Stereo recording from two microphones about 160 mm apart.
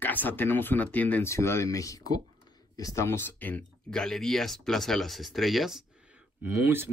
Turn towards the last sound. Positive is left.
turn(degrees=-15)  # may be behind; listen again after turning